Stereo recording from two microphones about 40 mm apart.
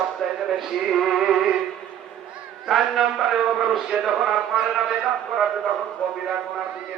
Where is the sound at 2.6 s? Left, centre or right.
Centre.